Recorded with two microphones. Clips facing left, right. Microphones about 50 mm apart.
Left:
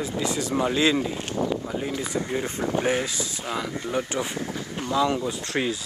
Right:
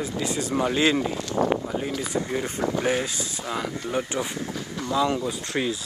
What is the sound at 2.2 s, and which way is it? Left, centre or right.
Speech, left.